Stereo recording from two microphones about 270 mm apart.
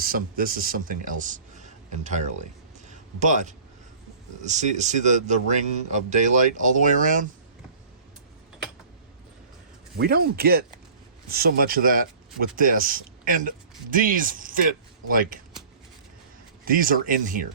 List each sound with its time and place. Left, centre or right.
0.0 s speech: right
2.9 s a sound: right
4.4 s speech: right
10.0 s speech: right
16.6 s speech: right